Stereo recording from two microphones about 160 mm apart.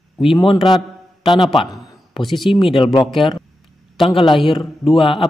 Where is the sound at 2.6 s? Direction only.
30° left (ahead or behind).